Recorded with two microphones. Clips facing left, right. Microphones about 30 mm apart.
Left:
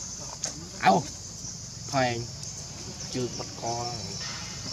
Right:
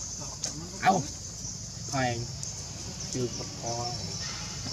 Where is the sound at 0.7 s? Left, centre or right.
Left.